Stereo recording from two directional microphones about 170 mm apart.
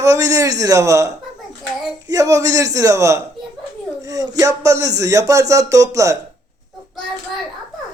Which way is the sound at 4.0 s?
20° right (ahead or behind).